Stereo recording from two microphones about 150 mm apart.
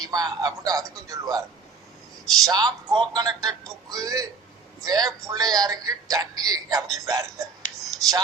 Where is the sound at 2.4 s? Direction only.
25° right (ahead or behind).